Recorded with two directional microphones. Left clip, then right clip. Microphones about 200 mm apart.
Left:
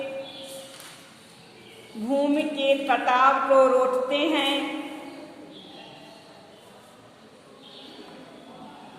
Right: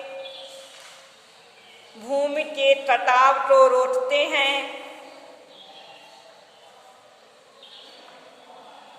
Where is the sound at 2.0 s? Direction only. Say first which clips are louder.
Even; 30° right (ahead or behind).